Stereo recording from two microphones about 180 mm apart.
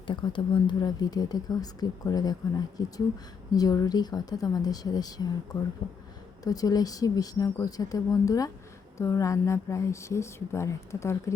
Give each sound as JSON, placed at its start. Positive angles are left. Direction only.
{"t": 0.1, "sound": "speech", "side_deg": 25}
{"t": 3.5, "sound": "speech", "side_deg": 20}